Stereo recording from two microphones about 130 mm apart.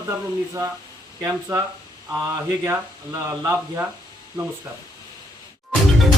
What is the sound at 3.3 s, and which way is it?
Speech, 20° right (ahead or behind).